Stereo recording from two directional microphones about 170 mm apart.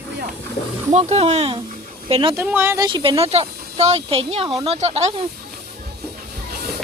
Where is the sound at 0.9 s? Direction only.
40° right (ahead or behind).